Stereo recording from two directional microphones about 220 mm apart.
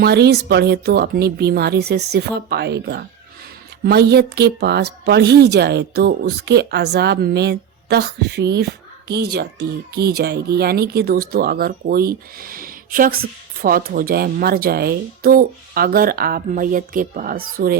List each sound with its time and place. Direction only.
0.0 s speech: 50° right (ahead or behind)